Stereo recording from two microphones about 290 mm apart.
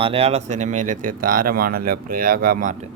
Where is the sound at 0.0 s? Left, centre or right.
Centre.